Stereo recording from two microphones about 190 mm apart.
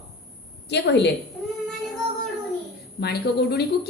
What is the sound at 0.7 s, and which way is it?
Speech, 65° left (ahead or behind).